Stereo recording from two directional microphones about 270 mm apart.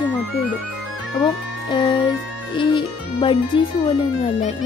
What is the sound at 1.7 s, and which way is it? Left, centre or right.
Speech, centre.